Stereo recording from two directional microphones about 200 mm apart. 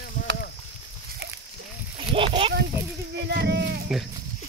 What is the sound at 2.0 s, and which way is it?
Speech, 25° right (ahead or behind).